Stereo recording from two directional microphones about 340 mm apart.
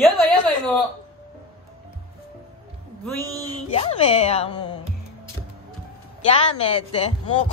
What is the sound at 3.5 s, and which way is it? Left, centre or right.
Speech, centre.